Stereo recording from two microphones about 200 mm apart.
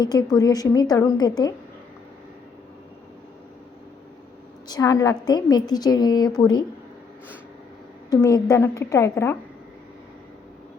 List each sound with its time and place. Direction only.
0.0 s a woman's voice: 20° left (ahead or behind)
4.7 s a woman's voice: 15° left (ahead or behind)
8.1 s a woman's voice: 15° left (ahead or behind)